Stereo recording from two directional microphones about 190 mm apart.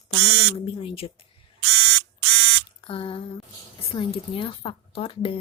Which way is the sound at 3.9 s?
25° left (ahead or behind).